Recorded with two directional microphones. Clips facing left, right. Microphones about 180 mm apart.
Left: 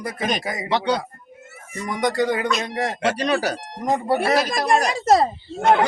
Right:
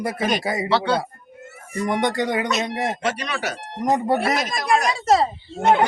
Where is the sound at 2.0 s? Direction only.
25° right (ahead or behind).